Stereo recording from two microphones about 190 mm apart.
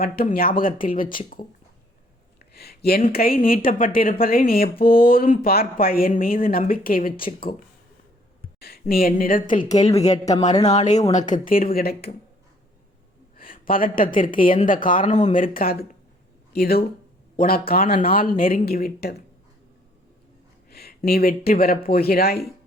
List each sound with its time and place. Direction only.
0.0 s speech: 50° left (ahead or behind)
2.5 s speech: 55° left (ahead or behind)
8.6 s speech: 55° left (ahead or behind)
13.3 s a woman's voice: 50° left (ahead or behind)
17.8 s speech: 30° left (ahead or behind)
18.1 s speech: 50° left (ahead or behind)
20.7 s speech: 55° left (ahead or behind)